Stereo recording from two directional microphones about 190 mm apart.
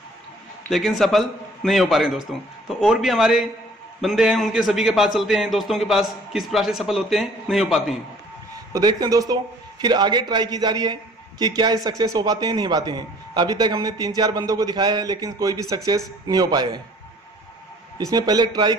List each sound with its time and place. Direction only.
0.7 s a man's voice: centre (ahead or behind)
8.7 s a man's voice: 20° right (ahead or behind)
17.9 s a man's voice: 20° right (ahead or behind)